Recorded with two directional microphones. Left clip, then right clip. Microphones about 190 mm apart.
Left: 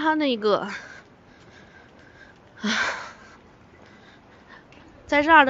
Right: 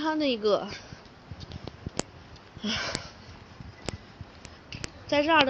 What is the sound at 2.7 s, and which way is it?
Sniff, 30° left (ahead or behind).